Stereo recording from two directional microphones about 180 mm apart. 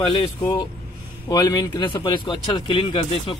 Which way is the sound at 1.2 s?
20° left (ahead or behind).